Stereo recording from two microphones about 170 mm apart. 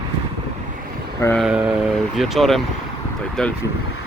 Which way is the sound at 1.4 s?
5° right (ahead or behind).